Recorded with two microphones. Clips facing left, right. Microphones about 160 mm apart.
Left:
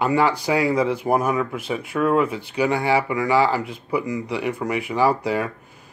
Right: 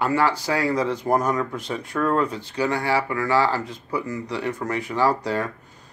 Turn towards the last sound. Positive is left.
turn(degrees=10)  # may be behind; listen again after turning